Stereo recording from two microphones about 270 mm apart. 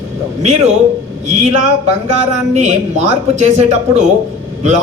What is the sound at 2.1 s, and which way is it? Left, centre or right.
A man's voice, right.